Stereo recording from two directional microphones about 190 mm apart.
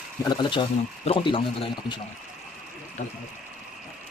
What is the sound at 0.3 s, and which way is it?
Speech, 25° left (ahead or behind).